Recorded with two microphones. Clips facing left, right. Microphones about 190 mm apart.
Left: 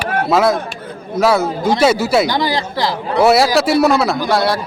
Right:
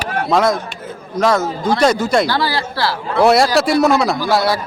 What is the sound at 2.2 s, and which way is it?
Speech, 20° left (ahead or behind).